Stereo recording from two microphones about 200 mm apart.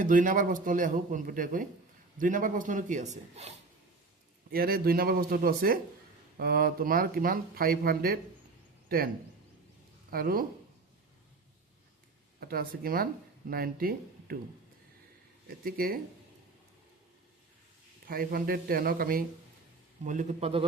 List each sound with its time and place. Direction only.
0.0 s a man's voice: 40° right (ahead or behind)
4.5 s speech: 50° right (ahead or behind)
10.1 s speech: 50° right (ahead or behind)
12.4 s speech: 50° right (ahead or behind)
15.4 s speech: 50° right (ahead or behind)
18.1 s a man's voice: 45° right (ahead or behind); by 20.7 s 30° right (ahead or behind)